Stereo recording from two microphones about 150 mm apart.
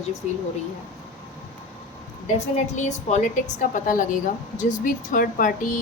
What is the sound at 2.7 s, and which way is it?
A woman's voice, 50° left (ahead or behind).